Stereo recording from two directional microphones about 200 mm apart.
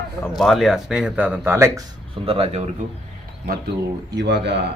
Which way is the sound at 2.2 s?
30° right (ahead or behind).